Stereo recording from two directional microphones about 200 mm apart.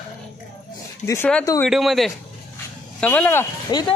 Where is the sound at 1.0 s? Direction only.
15° left (ahead or behind).